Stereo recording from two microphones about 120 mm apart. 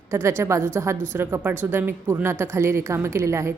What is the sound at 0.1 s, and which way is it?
A woman's voice, 20° right (ahead or behind).